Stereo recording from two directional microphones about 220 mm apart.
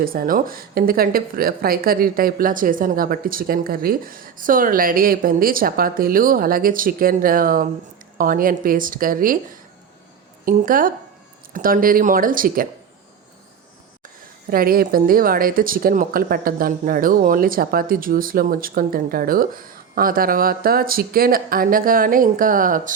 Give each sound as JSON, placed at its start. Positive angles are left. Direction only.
{"t": 0.0, "sound": "speech", "side_deg": -40}
{"t": 14.5, "sound": "speech", "side_deg": -40}